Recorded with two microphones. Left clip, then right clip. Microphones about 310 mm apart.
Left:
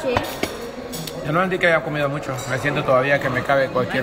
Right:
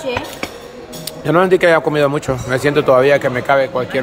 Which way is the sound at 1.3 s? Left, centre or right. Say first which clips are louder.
Right 7 dB; centre.